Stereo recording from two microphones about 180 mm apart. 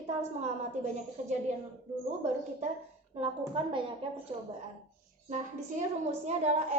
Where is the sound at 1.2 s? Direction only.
40° right (ahead or behind).